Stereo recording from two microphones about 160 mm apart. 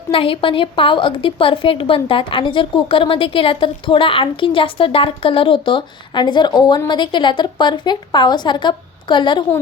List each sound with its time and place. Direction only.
0.1 s a woman's voice: 35° left (ahead or behind)